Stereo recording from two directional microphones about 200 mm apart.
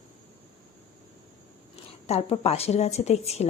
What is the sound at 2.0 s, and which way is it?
Speech, 30° left (ahead or behind).